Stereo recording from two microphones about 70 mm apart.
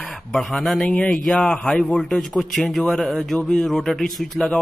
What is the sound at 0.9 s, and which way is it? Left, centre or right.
Speech, left.